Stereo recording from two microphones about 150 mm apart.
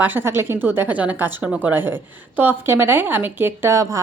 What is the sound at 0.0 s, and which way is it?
Speech, 15° right (ahead or behind).